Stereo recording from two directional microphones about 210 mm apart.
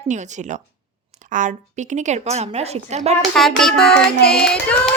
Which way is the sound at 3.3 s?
Centre (ahead or behind).